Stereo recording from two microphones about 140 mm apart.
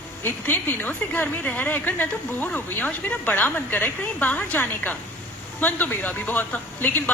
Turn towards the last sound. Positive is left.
turn(degrees=15)  # may be behind; listen again after turning